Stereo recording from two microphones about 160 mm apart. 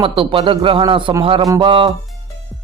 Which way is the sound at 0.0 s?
30° right (ahead or behind).